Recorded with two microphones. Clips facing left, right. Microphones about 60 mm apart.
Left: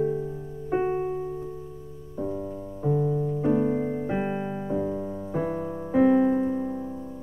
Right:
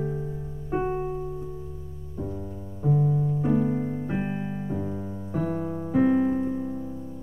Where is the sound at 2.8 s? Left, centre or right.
Centre.